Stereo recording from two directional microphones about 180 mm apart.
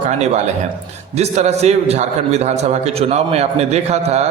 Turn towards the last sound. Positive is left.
turn(degrees=-35)  # may be behind; listen again after turning